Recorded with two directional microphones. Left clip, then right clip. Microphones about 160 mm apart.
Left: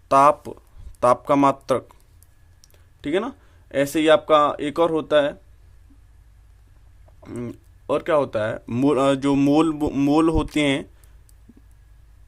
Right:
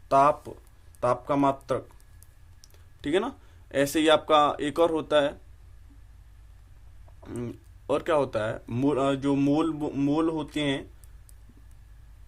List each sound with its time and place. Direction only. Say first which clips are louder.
0.1 s speech: left 6 dB; 45° left (ahead or behind)
2.6 s speech: left 4 dB; 25° left (ahead or behind)
7.2 s speech: left 4 dB; 25° left (ahead or behind); by 10.8 s 50° left (ahead or behind)